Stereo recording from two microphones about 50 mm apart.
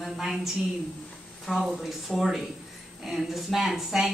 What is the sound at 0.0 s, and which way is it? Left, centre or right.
Speech, centre.